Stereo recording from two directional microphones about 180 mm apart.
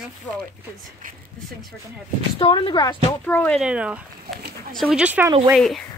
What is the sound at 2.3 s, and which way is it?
Speech, 30° left (ahead or behind).